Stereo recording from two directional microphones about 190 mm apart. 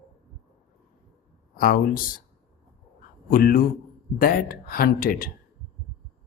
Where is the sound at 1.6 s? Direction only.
45° left (ahead or behind).